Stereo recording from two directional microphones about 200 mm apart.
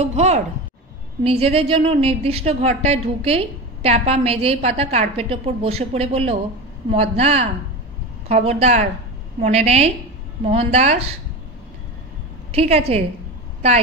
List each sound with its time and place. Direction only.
0.0 s a woman's voice: 35° right (ahead or behind)
12.4 s a woman's voice: 30° right (ahead or behind)